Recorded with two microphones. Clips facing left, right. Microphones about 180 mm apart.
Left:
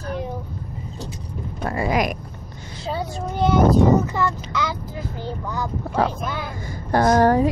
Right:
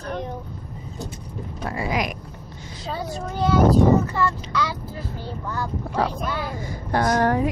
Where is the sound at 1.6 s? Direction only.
50° left (ahead or behind).